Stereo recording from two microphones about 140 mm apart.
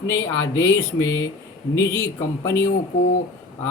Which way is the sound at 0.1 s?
20° left (ahead or behind).